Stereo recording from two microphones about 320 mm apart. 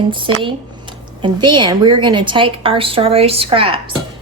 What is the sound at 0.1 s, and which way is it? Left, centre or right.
Speech, centre.